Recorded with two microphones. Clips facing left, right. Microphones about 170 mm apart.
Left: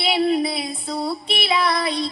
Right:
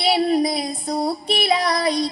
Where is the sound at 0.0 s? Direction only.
35° right (ahead or behind).